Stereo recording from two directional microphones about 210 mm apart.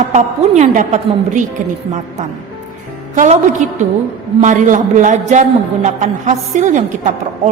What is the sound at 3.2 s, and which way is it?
A woman's voice, 35° right (ahead or behind).